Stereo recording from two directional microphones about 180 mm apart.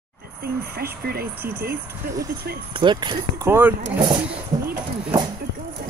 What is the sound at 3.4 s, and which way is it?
Speech, 10° right (ahead or behind).